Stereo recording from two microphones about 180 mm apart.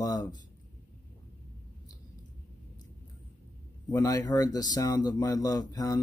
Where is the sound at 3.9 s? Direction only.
20° left (ahead or behind).